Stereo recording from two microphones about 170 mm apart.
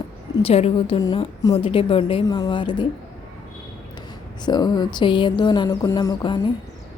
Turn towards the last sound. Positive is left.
turn(degrees=25)  # may be behind; listen again after turning